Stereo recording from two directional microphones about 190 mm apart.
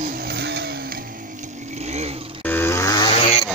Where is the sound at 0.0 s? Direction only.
50° right (ahead or behind); by 2.4 s 30° right (ahead or behind).